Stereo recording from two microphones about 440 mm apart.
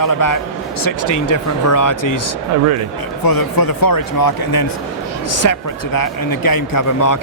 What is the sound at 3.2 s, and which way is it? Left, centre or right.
Speech, left.